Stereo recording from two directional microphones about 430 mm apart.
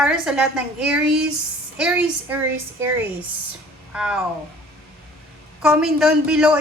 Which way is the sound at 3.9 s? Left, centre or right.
Centre.